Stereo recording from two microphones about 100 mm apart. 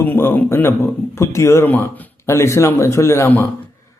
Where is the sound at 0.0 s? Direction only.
20° left (ahead or behind).